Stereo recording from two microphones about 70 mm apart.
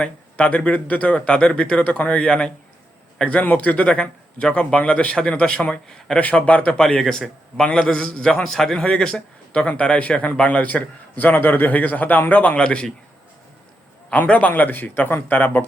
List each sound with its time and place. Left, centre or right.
0.0 s a man's voice: centre
14.1 s speech: centre